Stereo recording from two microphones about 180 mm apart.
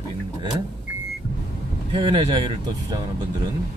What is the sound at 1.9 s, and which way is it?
Speech, 25° right (ahead or behind).